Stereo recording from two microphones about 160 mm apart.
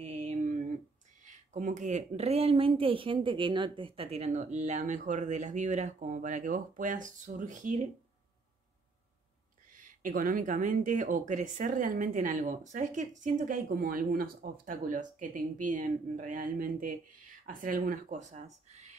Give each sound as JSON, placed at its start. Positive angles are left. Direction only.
{"t": 0.0, "sound": "a sound", "side_deg": -45}
{"t": 1.2, "sound": "a woman's voice", "side_deg": -50}
{"t": 9.7, "sound": "a woman's voice", "side_deg": -55}